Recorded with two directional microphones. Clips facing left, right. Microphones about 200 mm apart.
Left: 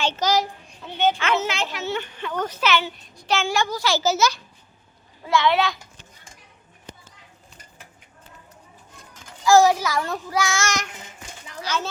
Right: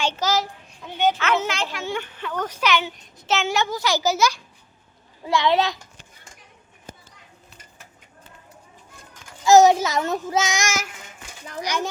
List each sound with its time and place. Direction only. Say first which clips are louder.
0.0 s a child's voice: left 1 dB; 10° right (ahead or behind)
1.8 s a child's voice: left 1 dB; 10° right (ahead or behind)
5.3 s a child's voice: even; 35° right (ahead or behind)
9.4 s a child's voice: right 2 dB; 20° right (ahead or behind)